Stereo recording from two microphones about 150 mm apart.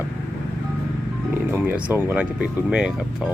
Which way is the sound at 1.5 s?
15° right (ahead or behind).